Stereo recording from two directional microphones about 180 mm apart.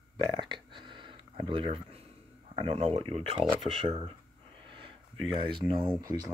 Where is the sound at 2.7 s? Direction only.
35° right (ahead or behind).